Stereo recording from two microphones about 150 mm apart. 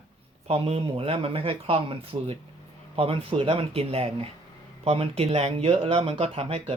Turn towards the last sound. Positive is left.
turn(degrees=-40)  # may be behind; listen again after turning